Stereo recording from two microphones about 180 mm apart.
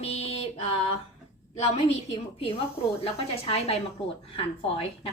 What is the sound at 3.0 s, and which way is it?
A woman's voice, 35° left (ahead or behind).